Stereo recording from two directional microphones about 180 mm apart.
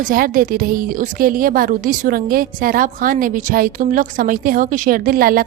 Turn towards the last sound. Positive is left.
turn(degrees=-55)  # may be behind; listen again after turning